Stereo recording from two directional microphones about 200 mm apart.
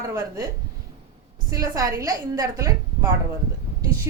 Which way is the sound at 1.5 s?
15° right (ahead or behind).